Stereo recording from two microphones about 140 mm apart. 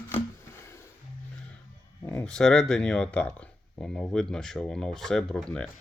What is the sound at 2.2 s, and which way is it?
Speech, 5° left (ahead or behind).